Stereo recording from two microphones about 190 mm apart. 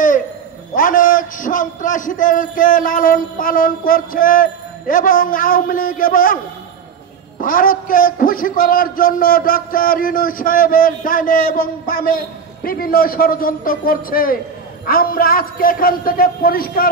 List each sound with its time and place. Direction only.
0.7 s a man's voice: 45° left (ahead or behind)
7.3 s a man's voice: 50° left (ahead or behind)